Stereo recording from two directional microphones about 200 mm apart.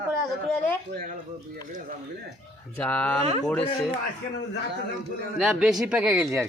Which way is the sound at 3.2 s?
30° right (ahead or behind).